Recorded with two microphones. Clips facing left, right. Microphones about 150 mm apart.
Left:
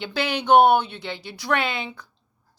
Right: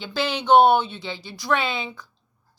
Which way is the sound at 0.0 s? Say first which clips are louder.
Even; 60° left (ahead or behind).